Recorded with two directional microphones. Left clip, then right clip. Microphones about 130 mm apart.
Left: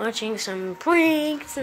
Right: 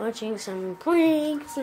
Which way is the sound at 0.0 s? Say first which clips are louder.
Left 3 dB; 10° right (ahead or behind).